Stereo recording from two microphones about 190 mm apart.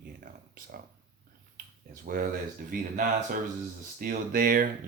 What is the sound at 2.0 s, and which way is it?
Speech, 45° right (ahead or behind).